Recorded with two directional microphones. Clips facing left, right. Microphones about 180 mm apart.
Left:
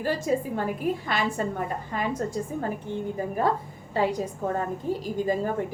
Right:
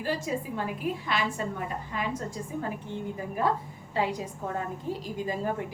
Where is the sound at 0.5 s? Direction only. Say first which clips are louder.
Left 4 dB; 45° left (ahead or behind).